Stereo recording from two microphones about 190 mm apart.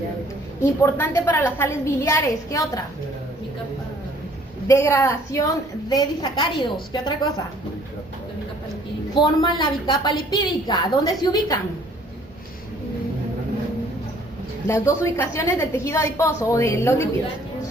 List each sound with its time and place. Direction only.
0.6 s a woman's voice: 15° left (ahead or behind)
4.7 s a woman's voice: 15° left (ahead or behind)
9.1 s a woman's voice: 25° left (ahead or behind)
14.7 s a woman's voice: 15° left (ahead or behind)